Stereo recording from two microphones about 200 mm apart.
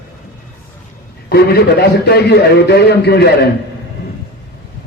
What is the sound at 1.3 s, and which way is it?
A man's voice, 55° left (ahead or behind).